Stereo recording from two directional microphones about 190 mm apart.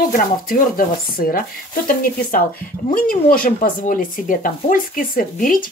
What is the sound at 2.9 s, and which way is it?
Speech, 50° left (ahead or behind).